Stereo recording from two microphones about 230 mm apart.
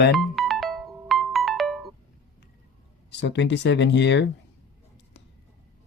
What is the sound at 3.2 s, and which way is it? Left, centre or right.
Speech, left.